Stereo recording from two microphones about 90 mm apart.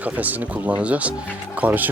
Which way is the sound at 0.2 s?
20° right (ahead or behind).